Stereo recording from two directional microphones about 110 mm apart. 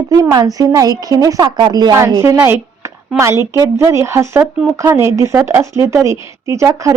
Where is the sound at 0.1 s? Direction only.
35° right (ahead or behind).